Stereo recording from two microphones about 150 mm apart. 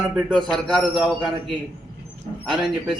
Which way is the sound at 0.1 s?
Centre (ahead or behind).